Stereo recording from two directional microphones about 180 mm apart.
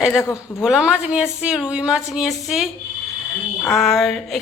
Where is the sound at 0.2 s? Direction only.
15° left (ahead or behind).